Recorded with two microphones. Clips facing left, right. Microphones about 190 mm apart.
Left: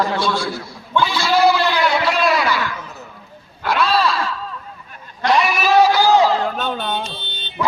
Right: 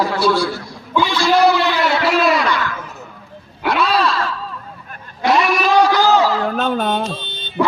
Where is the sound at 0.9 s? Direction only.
Centre (ahead or behind).